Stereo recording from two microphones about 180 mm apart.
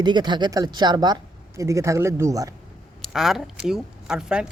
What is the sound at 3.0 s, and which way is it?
Speech, centre (ahead or behind).